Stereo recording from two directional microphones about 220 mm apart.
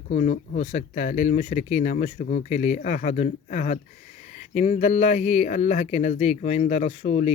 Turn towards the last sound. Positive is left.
turn(degrees=30)  # may be behind; listen again after turning